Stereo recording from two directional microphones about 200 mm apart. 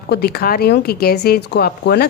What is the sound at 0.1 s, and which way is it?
Speech, 50° left (ahead or behind).